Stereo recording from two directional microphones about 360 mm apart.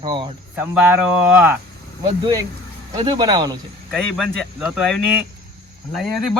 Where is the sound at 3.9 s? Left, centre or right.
Centre.